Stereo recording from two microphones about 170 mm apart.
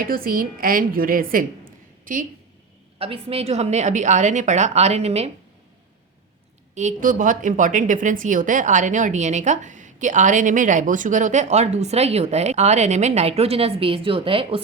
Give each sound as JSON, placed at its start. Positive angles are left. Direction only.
{"t": 0.0, "sound": "a woman's voice", "side_deg": -60}
{"t": 3.0, "sound": "a woman's voice", "side_deg": -35}
{"t": 6.7, "sound": "a woman's voice", "side_deg": -50}